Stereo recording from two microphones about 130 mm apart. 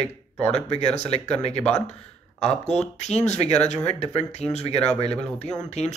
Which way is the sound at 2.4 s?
55° left (ahead or behind).